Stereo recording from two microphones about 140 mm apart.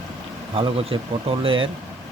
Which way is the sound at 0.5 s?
40° right (ahead or behind).